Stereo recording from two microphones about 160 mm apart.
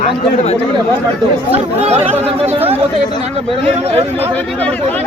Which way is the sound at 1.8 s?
40° right (ahead or behind).